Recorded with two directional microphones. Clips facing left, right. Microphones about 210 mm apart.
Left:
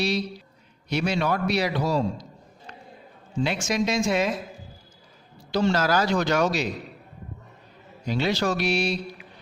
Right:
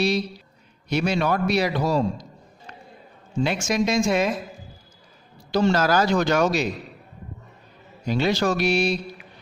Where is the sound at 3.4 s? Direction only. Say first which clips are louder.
Right 2 dB; 50° right (ahead or behind).